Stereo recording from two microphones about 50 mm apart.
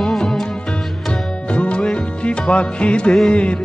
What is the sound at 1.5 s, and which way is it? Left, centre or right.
Music, left.